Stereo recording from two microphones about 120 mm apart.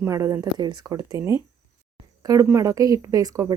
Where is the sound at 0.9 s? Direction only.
25° right (ahead or behind).